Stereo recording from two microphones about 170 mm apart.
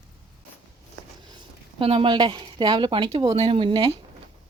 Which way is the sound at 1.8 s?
30° right (ahead or behind).